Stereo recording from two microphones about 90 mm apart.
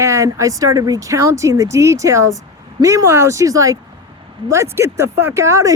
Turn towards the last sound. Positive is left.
turn(degrees=-35)  # may be behind; listen again after turning